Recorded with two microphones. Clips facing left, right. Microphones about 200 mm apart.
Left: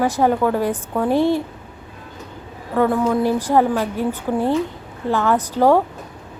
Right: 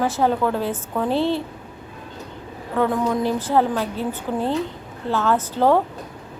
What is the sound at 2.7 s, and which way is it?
A woman's voice, 5° left (ahead or behind).